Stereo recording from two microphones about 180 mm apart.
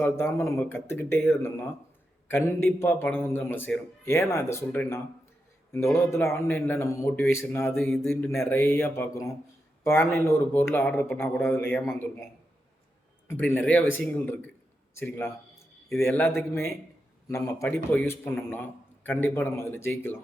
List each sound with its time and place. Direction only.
0.0 s a man's voice: 15° left (ahead or behind)